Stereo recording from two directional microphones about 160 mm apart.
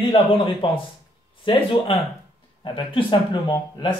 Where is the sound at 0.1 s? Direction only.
35° left (ahead or behind).